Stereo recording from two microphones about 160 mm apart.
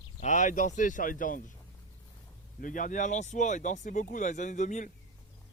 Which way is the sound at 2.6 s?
55° left (ahead or behind).